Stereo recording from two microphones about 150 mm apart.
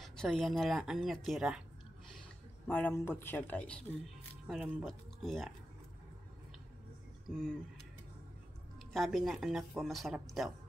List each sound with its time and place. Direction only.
0.0 s speech: 5° left (ahead or behind)
2.7 s speech: 10° left (ahead or behind)
7.2 s speech: centre (ahead or behind)
8.9 s speech: centre (ahead or behind)